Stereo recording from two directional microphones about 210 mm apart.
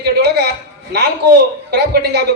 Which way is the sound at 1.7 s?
50° right (ahead or behind).